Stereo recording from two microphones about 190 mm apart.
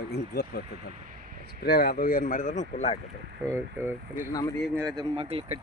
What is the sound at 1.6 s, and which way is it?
Speech, 55° left (ahead or behind).